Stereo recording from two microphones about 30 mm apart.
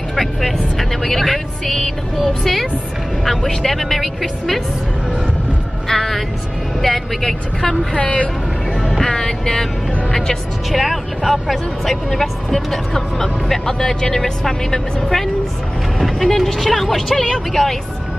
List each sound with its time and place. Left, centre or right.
0.1 s speech: centre
5.9 s music: centre
6.8 s speech: centre
8.0 s speech: left
9.0 s speech: centre
10.7 s speech: centre
13.5 s speech: centre